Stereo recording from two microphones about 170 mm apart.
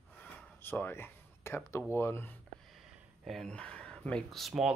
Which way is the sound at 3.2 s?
Centre (ahead or behind).